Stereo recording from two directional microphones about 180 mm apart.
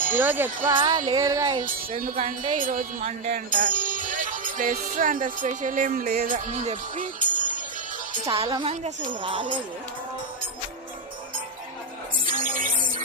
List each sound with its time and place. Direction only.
0.2 s speech: 10° right (ahead or behind)
0.8 s speech: 25° right (ahead or behind)
2.0 s speech: 50° right (ahead or behind)
8.2 s speech: 30° right (ahead or behind)
12.2 s music: 50° right (ahead or behind)